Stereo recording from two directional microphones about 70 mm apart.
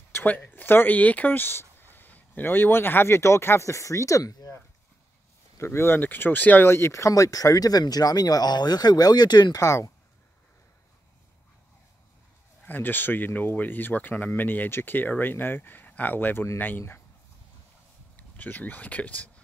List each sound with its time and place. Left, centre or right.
0.1 s speech: left
5.6 s speech: left
6.7 s speech: left
9.6 s speech: left
12.6 s speech: left
18.1 s speech: left